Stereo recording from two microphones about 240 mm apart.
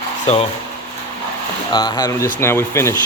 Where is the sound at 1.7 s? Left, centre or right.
Centre.